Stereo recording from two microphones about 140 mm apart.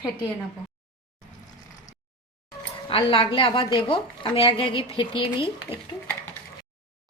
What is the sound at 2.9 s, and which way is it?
A woman's voice, 40° left (ahead or behind).